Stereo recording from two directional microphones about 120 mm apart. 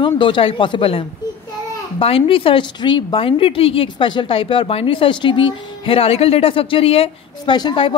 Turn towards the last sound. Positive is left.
turn(degrees=40)  # may be behind; listen again after turning